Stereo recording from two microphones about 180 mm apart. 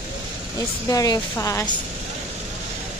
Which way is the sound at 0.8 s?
20° left (ahead or behind).